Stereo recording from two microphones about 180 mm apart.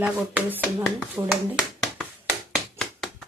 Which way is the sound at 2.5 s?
Centre (ahead or behind).